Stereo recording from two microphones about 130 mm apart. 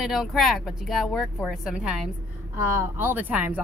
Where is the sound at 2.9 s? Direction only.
15° right (ahead or behind).